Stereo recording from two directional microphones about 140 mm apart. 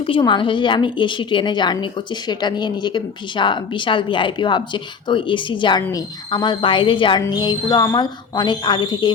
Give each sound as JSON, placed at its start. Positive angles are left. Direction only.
{"t": 0.0, "sound": "a woman's voice", "side_deg": 35}